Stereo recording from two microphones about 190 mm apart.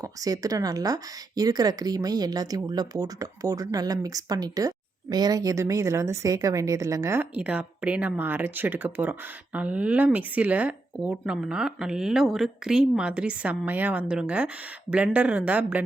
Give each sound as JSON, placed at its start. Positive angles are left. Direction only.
{"t": 0.0, "sound": "speech", "side_deg": -20}